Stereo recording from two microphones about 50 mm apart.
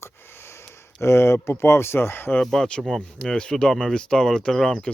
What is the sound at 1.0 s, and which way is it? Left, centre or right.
Speech, left.